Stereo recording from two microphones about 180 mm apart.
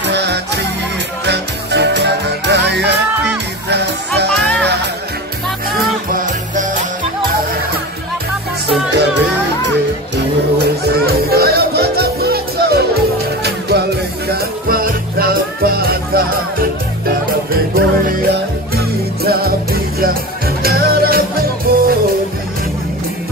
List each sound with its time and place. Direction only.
0.0 s music: 70° right (ahead or behind)
4.3 s music: 5° left (ahead or behind)
6.1 s music: 45° right (ahead or behind)
8.9 s music: 70° right (ahead or behind)
14.3 s music: 55° right (ahead or behind)